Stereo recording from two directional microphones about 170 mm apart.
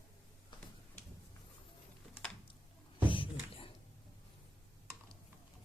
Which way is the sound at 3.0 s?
30° left (ahead or behind).